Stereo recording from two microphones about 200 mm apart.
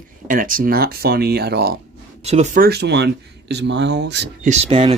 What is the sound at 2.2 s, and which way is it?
Speech, 35° right (ahead or behind).